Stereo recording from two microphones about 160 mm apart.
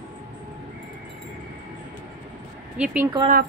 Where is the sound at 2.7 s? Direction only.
10° right (ahead or behind).